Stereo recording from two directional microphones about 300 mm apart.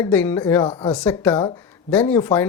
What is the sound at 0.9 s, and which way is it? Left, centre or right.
Speech, centre.